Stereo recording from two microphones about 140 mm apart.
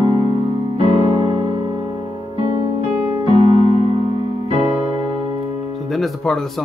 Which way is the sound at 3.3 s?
40° right (ahead or behind).